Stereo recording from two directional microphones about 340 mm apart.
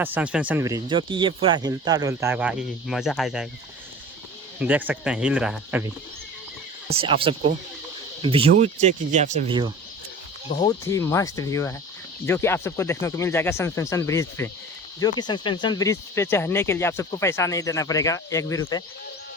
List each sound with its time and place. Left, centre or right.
0.0 s speech: centre
4.6 s speech: centre
6.9 s speech: centre
10.5 s speech: centre